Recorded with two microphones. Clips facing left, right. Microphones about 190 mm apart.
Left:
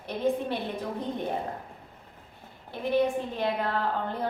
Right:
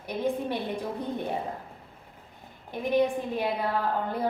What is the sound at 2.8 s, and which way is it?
Speech, 15° right (ahead or behind).